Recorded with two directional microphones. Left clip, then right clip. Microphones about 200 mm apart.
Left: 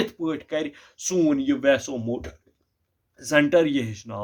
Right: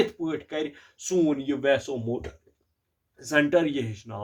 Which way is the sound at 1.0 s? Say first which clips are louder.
Left 3 dB; 50° left (ahead or behind).